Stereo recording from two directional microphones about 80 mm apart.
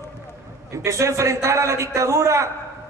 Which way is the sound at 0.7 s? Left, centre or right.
Right.